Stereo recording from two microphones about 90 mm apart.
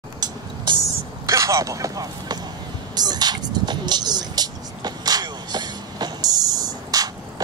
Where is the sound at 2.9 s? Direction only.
50° right (ahead or behind).